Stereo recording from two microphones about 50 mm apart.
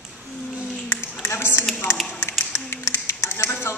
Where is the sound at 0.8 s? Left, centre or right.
Left.